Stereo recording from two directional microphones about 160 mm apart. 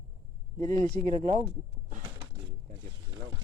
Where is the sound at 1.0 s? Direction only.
45° right (ahead or behind).